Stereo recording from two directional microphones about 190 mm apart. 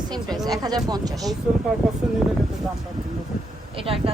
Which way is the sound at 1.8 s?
5° right (ahead or behind).